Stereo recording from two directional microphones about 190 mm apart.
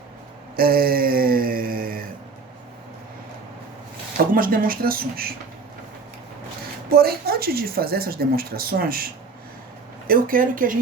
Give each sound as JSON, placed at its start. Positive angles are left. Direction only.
{"t": 0.5, "sound": "a sound", "side_deg": -50}
{"t": 4.4, "sound": "speech", "side_deg": -50}
{"t": 6.9, "sound": "speech", "side_deg": -55}